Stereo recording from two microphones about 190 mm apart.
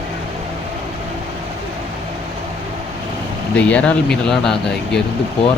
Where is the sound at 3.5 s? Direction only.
5° left (ahead or behind).